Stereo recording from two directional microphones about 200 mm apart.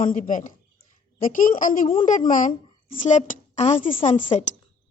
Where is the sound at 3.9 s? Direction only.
30° left (ahead or behind).